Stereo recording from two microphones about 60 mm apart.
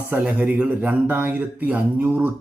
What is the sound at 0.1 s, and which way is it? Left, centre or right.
Speech, right.